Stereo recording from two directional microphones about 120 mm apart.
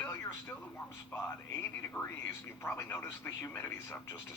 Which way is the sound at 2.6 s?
20° left (ahead or behind).